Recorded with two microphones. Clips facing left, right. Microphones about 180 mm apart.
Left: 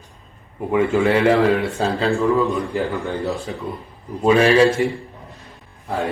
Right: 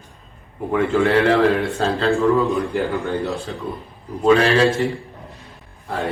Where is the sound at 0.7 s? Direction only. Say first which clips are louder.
Even; centre (ahead or behind).